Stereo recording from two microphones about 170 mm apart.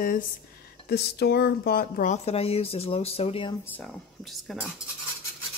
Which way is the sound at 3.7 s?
5° left (ahead or behind).